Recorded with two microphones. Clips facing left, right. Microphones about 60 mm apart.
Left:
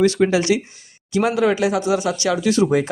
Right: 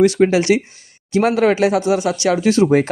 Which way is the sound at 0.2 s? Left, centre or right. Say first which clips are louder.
Right 3 dB; right.